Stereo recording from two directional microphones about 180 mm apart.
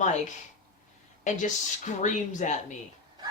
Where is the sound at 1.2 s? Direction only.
40° left (ahead or behind).